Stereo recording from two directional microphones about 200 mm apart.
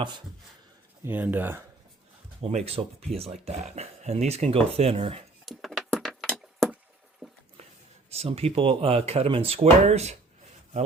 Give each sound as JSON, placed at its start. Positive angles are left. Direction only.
{"t": 1.0, "sound": "speech", "side_deg": -10}
{"t": 2.4, "sound": "speech", "side_deg": -30}
{"t": 5.5, "sound": "a sound", "side_deg": 0}
{"t": 8.1, "sound": "speech", "side_deg": -30}